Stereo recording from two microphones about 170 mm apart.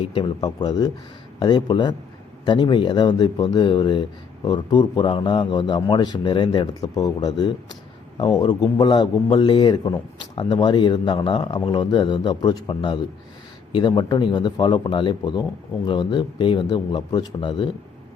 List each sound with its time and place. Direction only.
0.0 s a man's voice: 30° left (ahead or behind)